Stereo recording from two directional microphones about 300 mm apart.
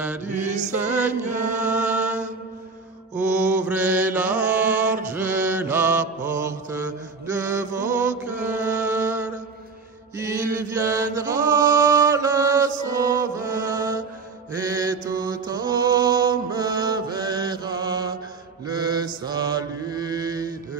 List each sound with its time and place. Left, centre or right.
0.5 s mantra: right
0.7 s music: centre
1.6 s chant: centre
3.2 s mantra: centre
10.1 s chant: centre
12.8 s music: centre
14.7 s mantra: centre